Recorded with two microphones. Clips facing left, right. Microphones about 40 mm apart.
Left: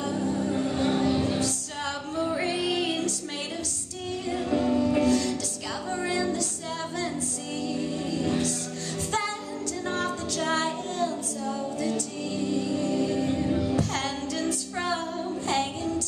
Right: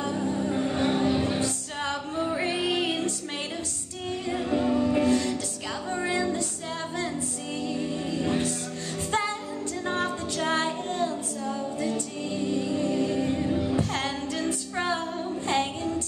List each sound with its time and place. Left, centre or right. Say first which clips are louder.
0.0 s music: even; centre
2.2 s music: left 1 dB; centre
2.5 s music: even; right
4.5 s music: even; centre
8.2 s music: even; right
9.8 s music: right 1 dB; right
15.4 s child singing: right 1 dB; right